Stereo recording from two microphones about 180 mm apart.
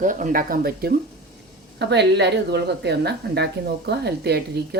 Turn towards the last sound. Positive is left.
turn(degrees=-65)  # may be behind; listen again after turning